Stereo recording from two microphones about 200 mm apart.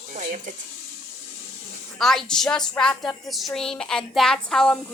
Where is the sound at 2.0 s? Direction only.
Centre (ahead or behind).